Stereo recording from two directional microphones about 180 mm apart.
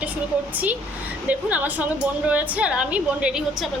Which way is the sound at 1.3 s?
10° right (ahead or behind).